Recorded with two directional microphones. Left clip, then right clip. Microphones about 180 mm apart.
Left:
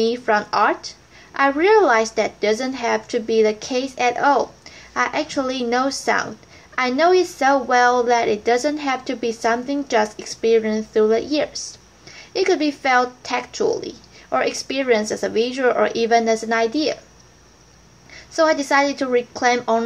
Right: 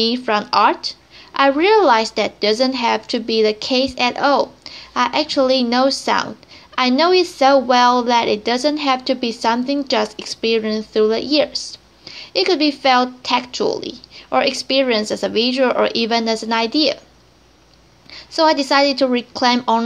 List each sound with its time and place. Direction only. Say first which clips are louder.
0.0 s a woman's voice: even; 30° right (ahead or behind)
18.3 s a woman's voice: right 2 dB; 25° right (ahead or behind)